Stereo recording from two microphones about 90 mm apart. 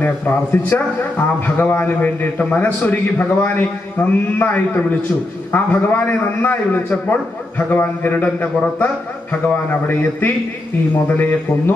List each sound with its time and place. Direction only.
0.0 s a man's voice: 20° left (ahead or behind)
11.1 s a man's voice: 20° left (ahead or behind)